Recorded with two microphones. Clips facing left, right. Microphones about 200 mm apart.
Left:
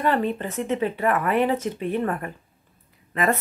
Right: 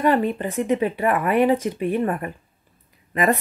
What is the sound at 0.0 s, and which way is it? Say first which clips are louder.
A woman's voice: right 3 dB; 10° right (ahead or behind).